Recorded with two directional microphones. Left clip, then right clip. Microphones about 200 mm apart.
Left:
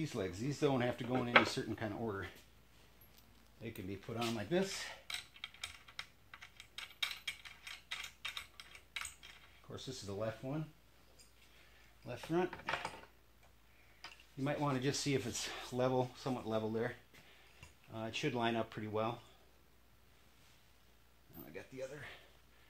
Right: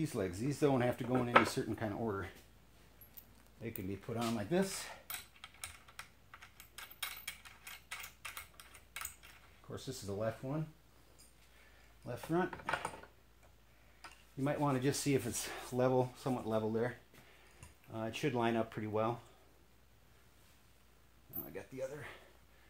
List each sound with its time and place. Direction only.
0.0 s speech: centre (ahead or behind)
3.6 s a sound: 5° right (ahead or behind)
9.7 s speech: centre (ahead or behind)
12.0 s speech: centre (ahead or behind)
14.4 s speech: centre (ahead or behind)